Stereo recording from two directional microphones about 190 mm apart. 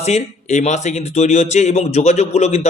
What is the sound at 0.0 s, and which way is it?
Speech, 35° left (ahead or behind).